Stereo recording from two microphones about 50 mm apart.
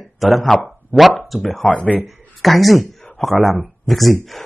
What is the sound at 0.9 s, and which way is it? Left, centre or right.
Speech, centre.